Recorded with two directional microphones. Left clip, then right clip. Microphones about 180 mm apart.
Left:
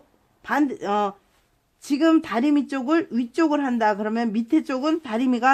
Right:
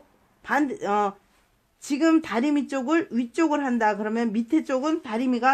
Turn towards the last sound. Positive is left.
turn(degrees=35)  # may be behind; listen again after turning